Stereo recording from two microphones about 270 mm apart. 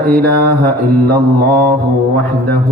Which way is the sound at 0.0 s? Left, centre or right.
Right.